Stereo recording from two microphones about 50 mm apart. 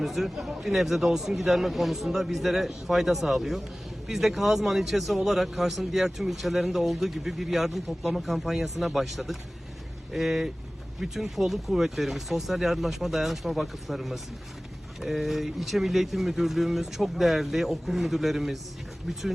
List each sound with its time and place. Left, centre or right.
0.0 s a man's voice: centre
2.0 s a man's voice: centre